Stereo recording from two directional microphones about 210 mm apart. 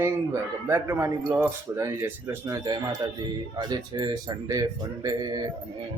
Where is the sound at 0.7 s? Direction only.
15° right (ahead or behind).